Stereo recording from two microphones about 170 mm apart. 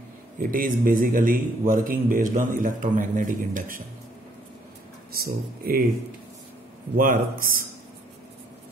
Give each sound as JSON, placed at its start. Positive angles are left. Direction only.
{"t": 0.4, "sound": "a man's voice", "side_deg": -55}
{"t": 5.1, "sound": "speech", "side_deg": -60}
{"t": 7.0, "sound": "speech", "side_deg": -55}